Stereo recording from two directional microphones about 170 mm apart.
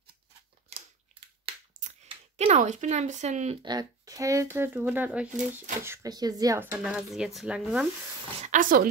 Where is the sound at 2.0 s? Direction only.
40° right (ahead or behind).